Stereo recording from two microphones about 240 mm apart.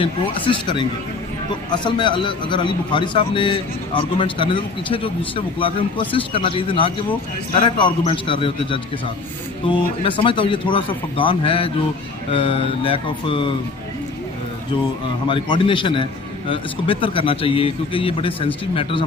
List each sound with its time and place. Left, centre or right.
0.0 s a man's voice: centre
15.3 s a man's voice: centre